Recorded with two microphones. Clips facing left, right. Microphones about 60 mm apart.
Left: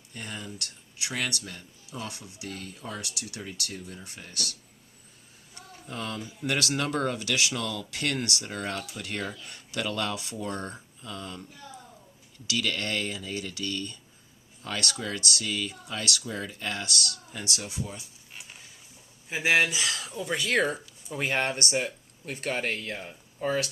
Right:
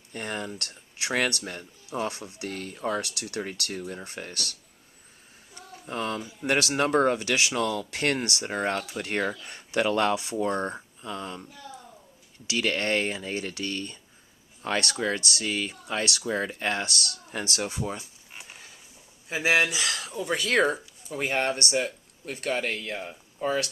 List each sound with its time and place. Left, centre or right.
0.1 s speech: right
5.8 s speech: right
12.5 s speech: right
17.3 s speech: right
19.4 s speech: right
20.1 s speech: centre
20.5 s speech: right
20.7 s speech: centre
21.2 s speech: left
22.8 s speech: right